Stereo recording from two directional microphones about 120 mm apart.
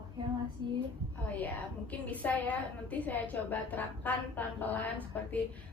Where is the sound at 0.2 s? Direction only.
35° right (ahead or behind).